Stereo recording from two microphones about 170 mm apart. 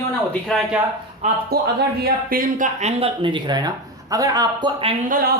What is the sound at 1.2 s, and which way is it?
Speech, 45° right (ahead or behind).